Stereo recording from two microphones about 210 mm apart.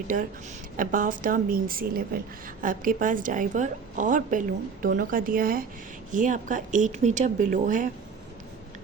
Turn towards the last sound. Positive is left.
turn(degrees=-40)  # may be behind; listen again after turning